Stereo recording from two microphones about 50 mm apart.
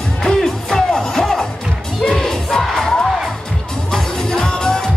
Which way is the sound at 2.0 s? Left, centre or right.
Centre.